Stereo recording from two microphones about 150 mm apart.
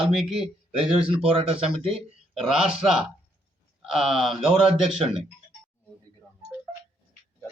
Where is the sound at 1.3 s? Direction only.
40° right (ahead or behind).